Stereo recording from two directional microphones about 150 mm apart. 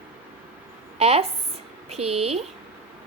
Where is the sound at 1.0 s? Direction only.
45° right (ahead or behind).